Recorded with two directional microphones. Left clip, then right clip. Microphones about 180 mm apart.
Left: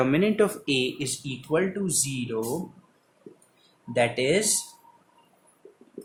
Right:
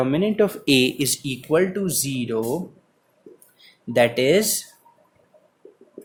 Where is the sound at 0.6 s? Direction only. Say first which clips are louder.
Right 7 dB; 60° right (ahead or behind).